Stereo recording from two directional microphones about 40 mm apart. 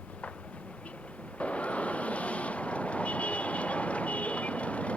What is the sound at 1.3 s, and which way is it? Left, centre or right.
Vehicle, left.